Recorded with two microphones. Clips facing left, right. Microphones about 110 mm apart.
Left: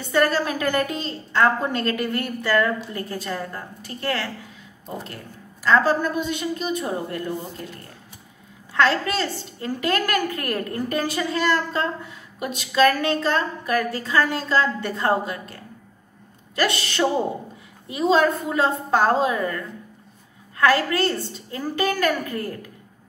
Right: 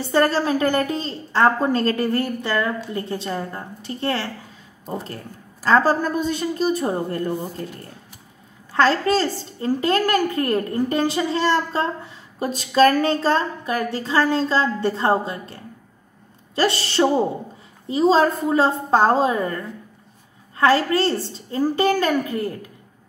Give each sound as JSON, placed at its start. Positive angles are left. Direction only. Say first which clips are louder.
{"t": 0.0, "sound": "a woman's voice", "louder": "right 2 dB", "side_deg": -30}
{"t": 2.4, "sound": "a woman's voice", "louder": "left 2 dB", "side_deg": -20}
{"t": 4.8, "sound": "a woman's voice", "louder": "right 4 dB", "side_deg": -35}
{"t": 8.7, "sound": "a woman's voice", "louder": "right 3 dB", "side_deg": -35}